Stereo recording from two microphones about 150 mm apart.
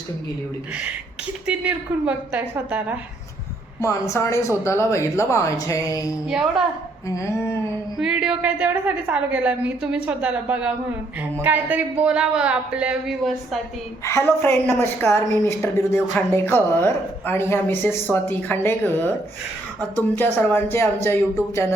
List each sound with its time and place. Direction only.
1.5 s a woman's voice: 10° right (ahead or behind)
3.8 s speech: 20° left (ahead or behind)
6.2 s a woman's voice: 5° right (ahead or behind)
7.1 s speech: 20° left (ahead or behind)
7.9 s a woman's voice: 5° right (ahead or behind)
14.0 s a woman's voice: 15° left (ahead or behind)